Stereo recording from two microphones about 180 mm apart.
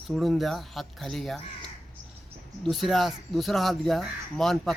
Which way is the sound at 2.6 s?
Centre (ahead or behind).